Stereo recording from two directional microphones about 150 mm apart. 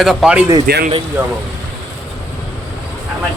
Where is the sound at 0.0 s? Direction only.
Centre (ahead or behind).